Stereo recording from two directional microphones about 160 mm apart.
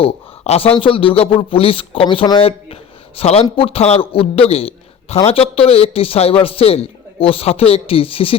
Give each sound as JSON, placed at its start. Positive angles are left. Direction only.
{"t": 0.0, "sound": "a man's voice", "side_deg": 40}